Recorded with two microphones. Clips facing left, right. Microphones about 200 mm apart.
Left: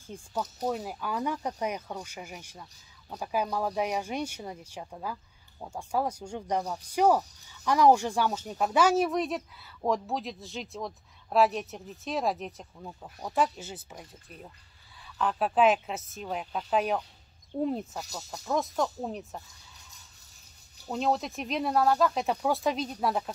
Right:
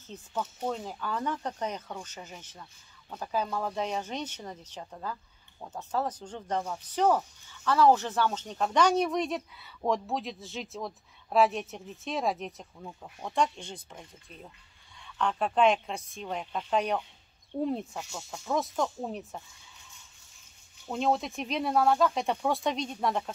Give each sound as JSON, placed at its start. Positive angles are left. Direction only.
{"t": 0.0, "sound": "speech", "side_deg": 10}
{"t": 15.0, "sound": "speech", "side_deg": 5}
{"t": 17.9, "sound": "speech", "side_deg": 40}
{"t": 18.5, "sound": "speech", "side_deg": 0}
{"t": 20.9, "sound": "speech", "side_deg": 0}